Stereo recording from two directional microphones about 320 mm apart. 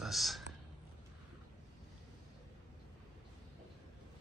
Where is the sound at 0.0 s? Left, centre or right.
Centre.